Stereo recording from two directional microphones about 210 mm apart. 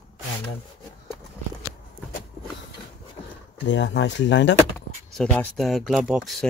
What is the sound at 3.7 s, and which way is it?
Speech, 60° left (ahead or behind).